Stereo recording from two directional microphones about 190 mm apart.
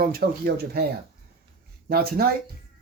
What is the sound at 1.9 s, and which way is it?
Speech, 55° right (ahead or behind).